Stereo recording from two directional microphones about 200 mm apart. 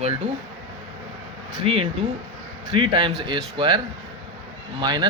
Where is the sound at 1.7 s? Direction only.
30° right (ahead or behind).